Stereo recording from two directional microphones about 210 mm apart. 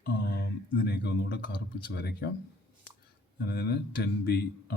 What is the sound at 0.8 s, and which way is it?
Speech, 50° left (ahead or behind).